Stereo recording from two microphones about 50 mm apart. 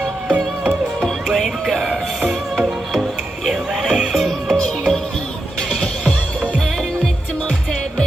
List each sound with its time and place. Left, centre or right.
0.3 s music: right
1.0 s music: centre